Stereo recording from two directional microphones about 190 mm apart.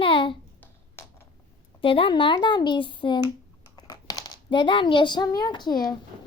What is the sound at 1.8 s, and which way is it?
A woman's voice, 30° left (ahead or behind).